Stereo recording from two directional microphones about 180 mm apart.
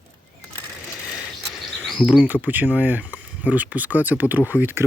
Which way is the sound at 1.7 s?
Centre (ahead or behind).